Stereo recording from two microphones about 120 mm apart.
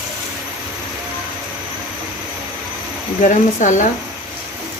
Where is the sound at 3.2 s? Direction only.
90° left.